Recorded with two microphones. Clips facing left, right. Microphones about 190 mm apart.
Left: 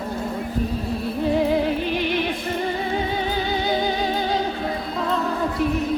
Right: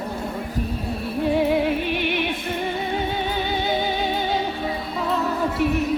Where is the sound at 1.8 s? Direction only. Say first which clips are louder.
Left 1 dB; 60° right (ahead or behind).